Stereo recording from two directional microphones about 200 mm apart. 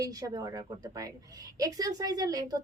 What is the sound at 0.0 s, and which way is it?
A woman's voice, 20° right (ahead or behind).